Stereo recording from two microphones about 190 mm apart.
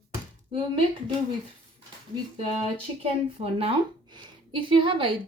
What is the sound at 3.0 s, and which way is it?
A woman's voice, 30° right (ahead or behind).